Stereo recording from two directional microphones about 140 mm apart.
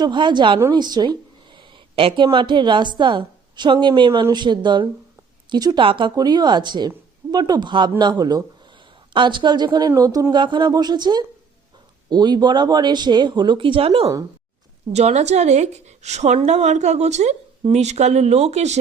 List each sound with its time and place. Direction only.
0.0 s a woman's voice: 35° right (ahead or behind); by 18.8 s 50° right (ahead or behind)